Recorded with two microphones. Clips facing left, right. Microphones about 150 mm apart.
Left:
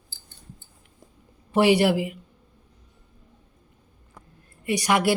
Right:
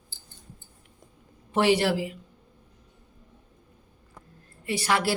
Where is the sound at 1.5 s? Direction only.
10° left (ahead or behind).